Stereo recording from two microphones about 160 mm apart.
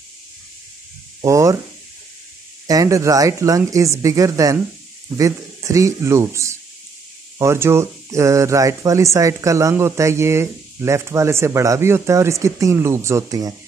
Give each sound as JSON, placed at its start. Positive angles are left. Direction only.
{"t": 1.2, "sound": "speech", "side_deg": -20}
{"t": 2.6, "sound": "speech", "side_deg": -20}